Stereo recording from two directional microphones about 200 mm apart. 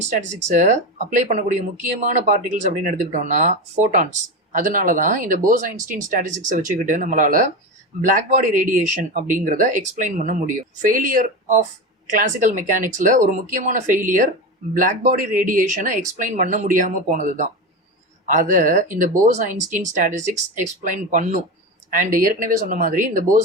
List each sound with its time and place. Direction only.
0.0 s speech: 40° right (ahead or behind)